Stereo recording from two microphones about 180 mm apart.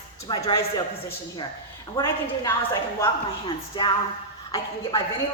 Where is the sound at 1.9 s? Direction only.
15° left (ahead or behind).